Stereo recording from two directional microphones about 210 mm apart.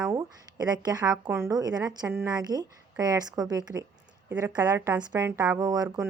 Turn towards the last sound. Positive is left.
turn(degrees=-20)  # may be behind; listen again after turning